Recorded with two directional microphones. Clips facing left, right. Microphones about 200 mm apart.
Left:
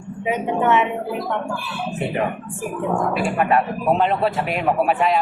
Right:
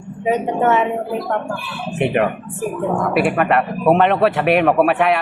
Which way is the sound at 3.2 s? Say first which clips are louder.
Right 6 dB; 70° right (ahead or behind).